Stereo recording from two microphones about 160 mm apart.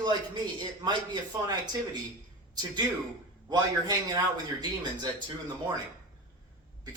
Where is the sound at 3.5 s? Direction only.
25° right (ahead or behind).